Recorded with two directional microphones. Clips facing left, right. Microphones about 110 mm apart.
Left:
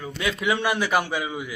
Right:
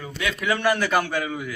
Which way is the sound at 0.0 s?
20° left (ahead or behind).